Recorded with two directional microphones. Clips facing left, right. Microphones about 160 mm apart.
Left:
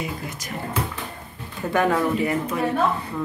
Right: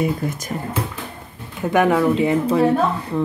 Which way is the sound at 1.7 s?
15° right (ahead or behind).